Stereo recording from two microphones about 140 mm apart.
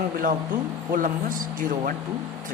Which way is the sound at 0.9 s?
70° right (ahead or behind).